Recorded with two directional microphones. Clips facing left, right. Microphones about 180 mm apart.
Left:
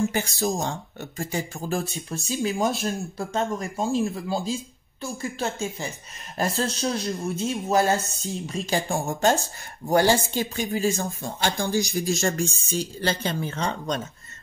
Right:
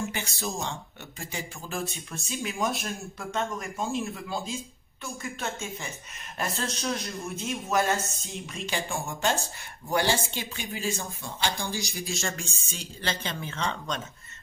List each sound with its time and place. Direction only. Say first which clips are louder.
0.1 s speech: left 8 dB; 40° left (ahead or behind)